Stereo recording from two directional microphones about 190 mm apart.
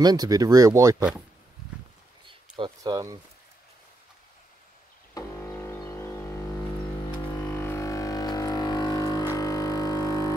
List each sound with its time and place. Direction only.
0.0 s speech: 20° right (ahead or behind)
2.2 s a sound: 25° right (ahead or behind)
5.1 s music: 15° left (ahead or behind)
7.5 s didgeridoo: 15° left (ahead or behind)
9.4 s music: 20° left (ahead or behind)